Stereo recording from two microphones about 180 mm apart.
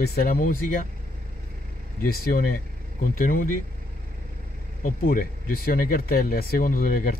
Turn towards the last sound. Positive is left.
turn(degrees=50)  # may be behind; listen again after turning